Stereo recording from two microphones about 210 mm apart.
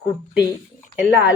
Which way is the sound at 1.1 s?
5° right (ahead or behind).